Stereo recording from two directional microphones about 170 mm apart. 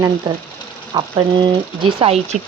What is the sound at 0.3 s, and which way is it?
Speech, 25° right (ahead or behind).